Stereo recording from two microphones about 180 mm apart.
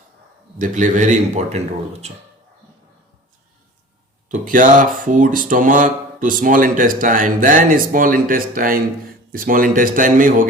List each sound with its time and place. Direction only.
0.6 s speech: 45° right (ahead or behind)
4.3 s speech: 45° right (ahead or behind)